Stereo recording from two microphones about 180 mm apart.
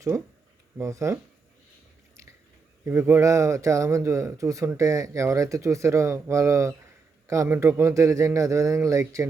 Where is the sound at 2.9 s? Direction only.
15° right (ahead or behind).